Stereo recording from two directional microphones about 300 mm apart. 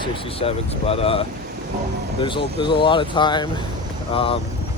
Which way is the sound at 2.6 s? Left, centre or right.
Centre.